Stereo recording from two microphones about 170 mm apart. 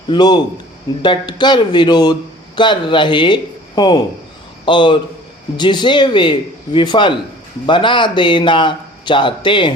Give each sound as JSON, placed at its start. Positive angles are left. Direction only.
{"t": 0.1, "sound": "a man's voice", "side_deg": 25}